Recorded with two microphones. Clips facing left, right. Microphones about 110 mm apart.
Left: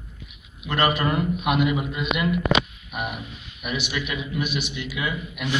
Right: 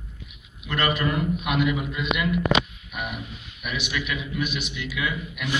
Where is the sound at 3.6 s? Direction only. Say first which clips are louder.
Left 2 dB; 40° left (ahead or behind).